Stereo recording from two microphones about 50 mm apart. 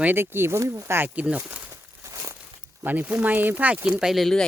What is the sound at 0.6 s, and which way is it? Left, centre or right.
Speech, right.